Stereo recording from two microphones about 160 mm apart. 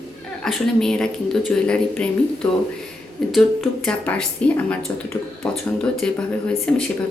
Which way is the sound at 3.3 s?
5° left (ahead or behind).